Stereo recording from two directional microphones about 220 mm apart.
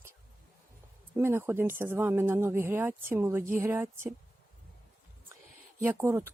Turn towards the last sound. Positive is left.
turn(degrees=-10)  # may be behind; listen again after turning